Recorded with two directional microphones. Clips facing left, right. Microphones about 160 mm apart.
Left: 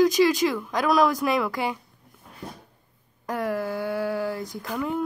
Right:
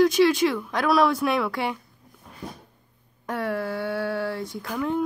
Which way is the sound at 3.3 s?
Centre (ahead or behind).